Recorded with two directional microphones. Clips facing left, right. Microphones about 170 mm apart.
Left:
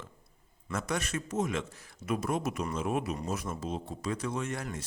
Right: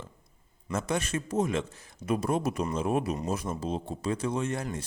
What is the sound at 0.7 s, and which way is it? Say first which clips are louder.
A man's voice: right 3 dB; 25° right (ahead or behind).